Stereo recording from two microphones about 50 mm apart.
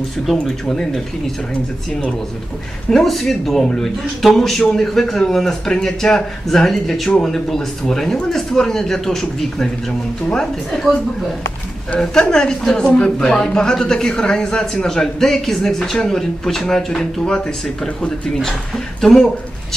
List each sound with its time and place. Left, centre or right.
0.3 s a man's voice: centre
1.5 s speech: left
2.9 s a man's voice: centre
12.2 s a man's voice: centre
18.9 s speech: centre